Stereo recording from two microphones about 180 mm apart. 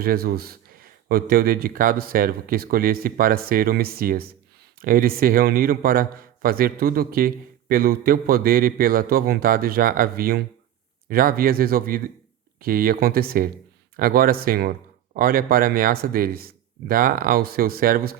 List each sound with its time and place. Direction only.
0.0 s a man's voice: 55° right (ahead or behind)